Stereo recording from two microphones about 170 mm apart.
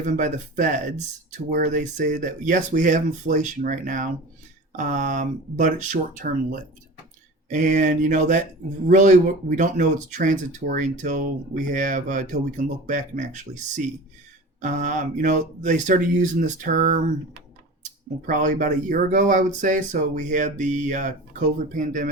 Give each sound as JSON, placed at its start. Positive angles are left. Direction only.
{"t": 0.0, "sound": "speech", "side_deg": -50}
{"t": 7.5, "sound": "speech", "side_deg": -45}
{"t": 18.3, "sound": "speech", "side_deg": -50}